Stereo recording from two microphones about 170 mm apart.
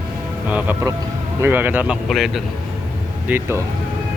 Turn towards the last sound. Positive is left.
turn(degrees=-10)  # may be behind; listen again after turning